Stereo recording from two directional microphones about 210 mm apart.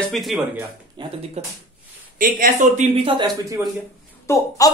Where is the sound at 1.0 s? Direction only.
20° right (ahead or behind).